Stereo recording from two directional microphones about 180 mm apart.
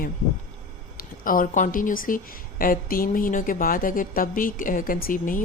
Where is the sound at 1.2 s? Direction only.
50° left (ahead or behind).